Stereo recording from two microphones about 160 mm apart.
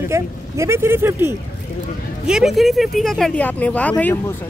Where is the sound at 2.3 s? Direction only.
5° right (ahead or behind).